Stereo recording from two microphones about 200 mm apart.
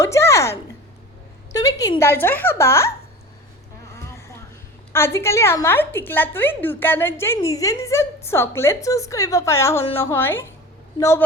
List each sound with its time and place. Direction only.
0.0 s a sound: 15° left (ahead or behind)
1.8 s a woman's voice: 15° left (ahead or behind)
4.9 s a woman's voice: 10° left (ahead or behind)